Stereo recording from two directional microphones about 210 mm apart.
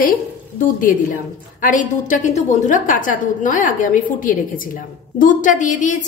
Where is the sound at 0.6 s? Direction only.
40° left (ahead or behind).